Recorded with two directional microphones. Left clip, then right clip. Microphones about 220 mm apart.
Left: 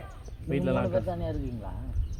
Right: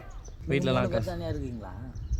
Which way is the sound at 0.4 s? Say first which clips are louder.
Right 1 dB; 50° right (ahead or behind).